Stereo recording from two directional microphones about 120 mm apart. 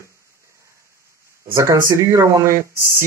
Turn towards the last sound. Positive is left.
turn(degrees=-25)  # may be behind; listen again after turning